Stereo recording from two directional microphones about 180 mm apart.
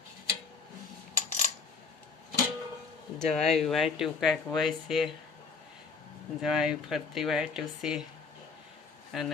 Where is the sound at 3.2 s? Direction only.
Centre (ahead or behind).